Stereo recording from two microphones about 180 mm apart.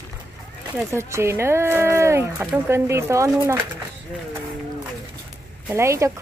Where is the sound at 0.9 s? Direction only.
15° right (ahead or behind).